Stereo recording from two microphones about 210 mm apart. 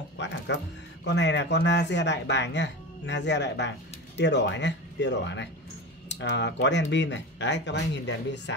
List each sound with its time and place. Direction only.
0.2 s speech: 55° left (ahead or behind)